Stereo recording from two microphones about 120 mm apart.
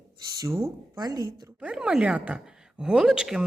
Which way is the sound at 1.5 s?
10° right (ahead or behind).